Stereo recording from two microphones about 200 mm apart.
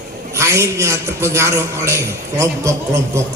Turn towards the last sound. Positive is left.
turn(degrees=-15)  # may be behind; listen again after turning